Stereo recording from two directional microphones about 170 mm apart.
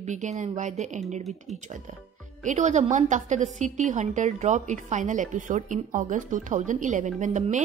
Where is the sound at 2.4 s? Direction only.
45° right (ahead or behind).